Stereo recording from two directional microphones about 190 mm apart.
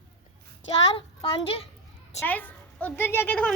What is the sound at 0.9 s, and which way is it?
Speech, 25° left (ahead or behind).